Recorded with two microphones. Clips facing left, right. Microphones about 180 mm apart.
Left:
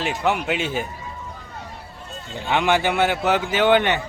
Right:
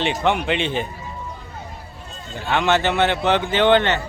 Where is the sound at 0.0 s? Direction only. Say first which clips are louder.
Right 2 dB; 5° left (ahead or behind).